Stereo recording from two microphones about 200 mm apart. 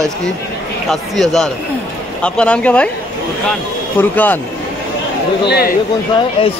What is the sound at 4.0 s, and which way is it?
Speech, 10° left (ahead or behind).